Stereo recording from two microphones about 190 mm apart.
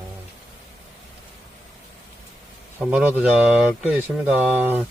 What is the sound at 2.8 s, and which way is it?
Speech, 5° right (ahead or behind).